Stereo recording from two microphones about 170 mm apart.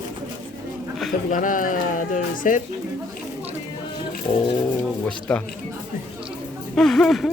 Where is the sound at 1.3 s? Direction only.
50° left (ahead or behind).